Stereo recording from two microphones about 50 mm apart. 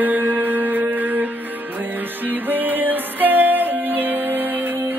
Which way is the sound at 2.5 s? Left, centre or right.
Right.